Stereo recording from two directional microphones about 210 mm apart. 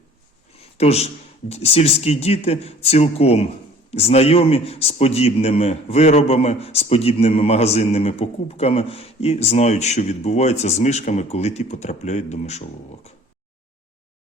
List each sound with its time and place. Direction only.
0.5 s a man's voice: 30° left (ahead or behind)